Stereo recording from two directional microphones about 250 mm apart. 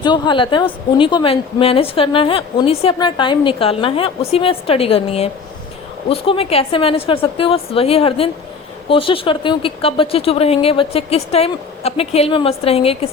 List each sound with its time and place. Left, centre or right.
0.0 s a woman's voice: centre